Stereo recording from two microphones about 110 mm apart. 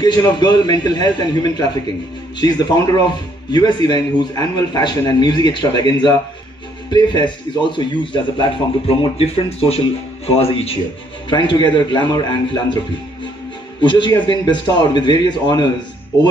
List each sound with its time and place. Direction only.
0.0 s a man's voice: 40° left (ahead or behind)
3.1 s a man's voice: 40° left (ahead or behind); by 10.8 s 65° left (ahead or behind)
11.2 s a man's voice: 45° left (ahead or behind)
13.7 s a man's voice: 45° left (ahead or behind)